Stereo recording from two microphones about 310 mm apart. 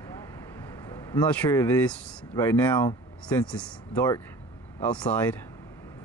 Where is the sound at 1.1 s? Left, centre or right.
Centre.